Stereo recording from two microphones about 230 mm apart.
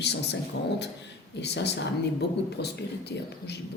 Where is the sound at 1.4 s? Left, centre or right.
Left.